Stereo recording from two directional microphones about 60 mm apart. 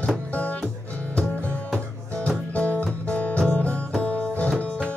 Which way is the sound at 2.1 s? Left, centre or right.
Centre.